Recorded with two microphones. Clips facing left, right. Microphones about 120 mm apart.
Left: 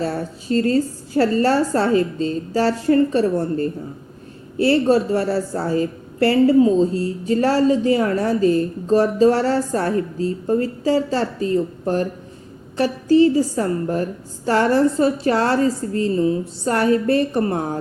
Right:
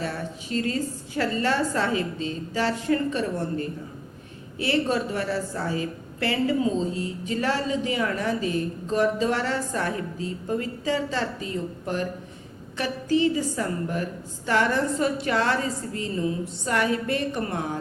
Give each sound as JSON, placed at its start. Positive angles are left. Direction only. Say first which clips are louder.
{"t": 0.0, "sound": "a woman's voice", "louder": "left 7 dB", "side_deg": 35}